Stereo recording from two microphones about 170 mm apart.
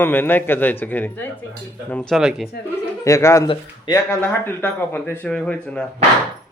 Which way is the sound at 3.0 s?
15° left (ahead or behind).